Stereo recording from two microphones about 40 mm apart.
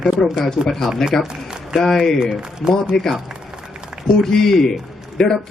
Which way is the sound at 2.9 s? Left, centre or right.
Left.